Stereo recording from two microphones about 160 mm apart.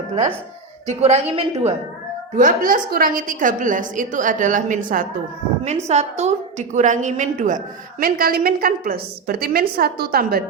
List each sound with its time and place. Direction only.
0.9 s a woman's voice: 40° right (ahead or behind)
2.3 s a woman's voice: 60° right (ahead or behind)